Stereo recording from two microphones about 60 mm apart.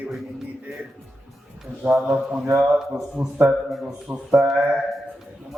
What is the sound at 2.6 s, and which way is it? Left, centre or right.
Speech, centre.